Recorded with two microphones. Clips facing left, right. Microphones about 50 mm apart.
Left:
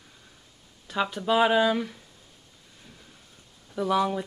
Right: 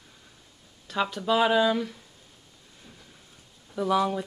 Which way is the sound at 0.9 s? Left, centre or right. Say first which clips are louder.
Even; centre.